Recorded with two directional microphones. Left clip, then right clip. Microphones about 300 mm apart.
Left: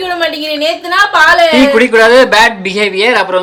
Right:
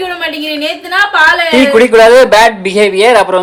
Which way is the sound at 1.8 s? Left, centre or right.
Centre.